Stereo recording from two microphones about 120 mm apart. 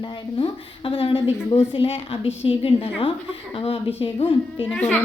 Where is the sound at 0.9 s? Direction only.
45° left (ahead or behind).